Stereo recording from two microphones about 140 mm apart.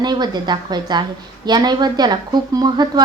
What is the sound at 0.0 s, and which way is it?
A woman's voice, 30° right (ahead or behind).